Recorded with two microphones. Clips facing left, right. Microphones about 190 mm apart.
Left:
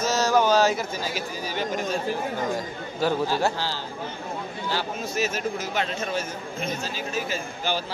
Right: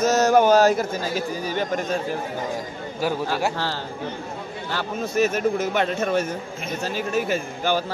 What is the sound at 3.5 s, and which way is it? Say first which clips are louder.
A man's voice: right 3 dB; 60° right (ahead or behind).